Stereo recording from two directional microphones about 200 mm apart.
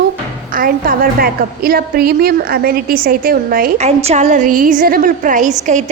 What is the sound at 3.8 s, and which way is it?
A woman's voice, 30° right (ahead or behind).